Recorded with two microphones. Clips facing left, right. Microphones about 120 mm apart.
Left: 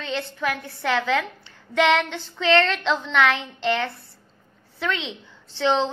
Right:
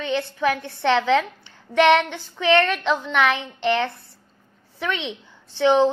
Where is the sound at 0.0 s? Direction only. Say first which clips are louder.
Right 5 dB; 20° right (ahead or behind).